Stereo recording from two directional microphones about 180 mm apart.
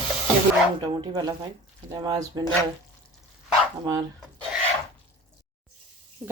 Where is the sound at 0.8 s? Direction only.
25° right (ahead or behind).